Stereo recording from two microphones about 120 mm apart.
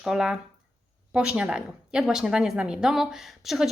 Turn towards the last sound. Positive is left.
turn(degrees=0)  # may be behind; listen again after turning